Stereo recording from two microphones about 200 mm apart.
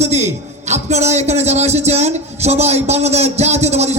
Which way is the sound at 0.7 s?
35° right (ahead or behind).